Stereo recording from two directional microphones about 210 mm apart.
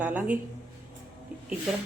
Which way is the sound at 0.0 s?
5° right (ahead or behind).